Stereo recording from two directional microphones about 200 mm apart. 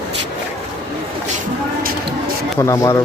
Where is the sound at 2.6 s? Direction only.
15° left (ahead or behind).